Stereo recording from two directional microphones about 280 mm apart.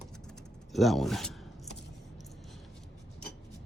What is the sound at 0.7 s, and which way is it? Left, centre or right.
Speech, centre.